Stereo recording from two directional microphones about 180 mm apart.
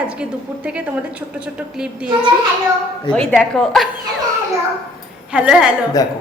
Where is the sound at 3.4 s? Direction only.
Centre (ahead or behind).